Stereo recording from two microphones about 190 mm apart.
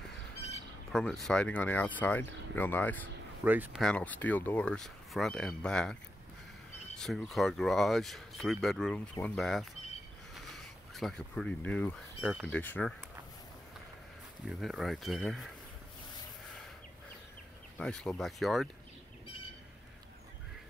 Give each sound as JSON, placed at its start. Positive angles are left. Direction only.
{"t": 0.4, "sound": "a sound", "side_deg": 35}
{"t": 0.9, "sound": "speech", "side_deg": 0}
{"t": 3.4, "sound": "speech", "side_deg": -10}
{"t": 3.8, "sound": "speech", "side_deg": 5}
{"t": 7.0, "sound": "speech", "side_deg": 0}
{"t": 10.3, "sound": "a sound", "side_deg": 0}
{"t": 12.2, "sound": "speech", "side_deg": -5}
{"t": 14.6, "sound": "speech", "side_deg": 0}
{"t": 17.7, "sound": "speech", "side_deg": 5}